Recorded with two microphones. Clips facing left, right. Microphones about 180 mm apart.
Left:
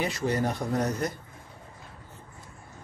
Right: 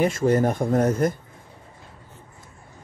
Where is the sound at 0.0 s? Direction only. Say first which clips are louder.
Right 8 dB; 50° right (ahead or behind).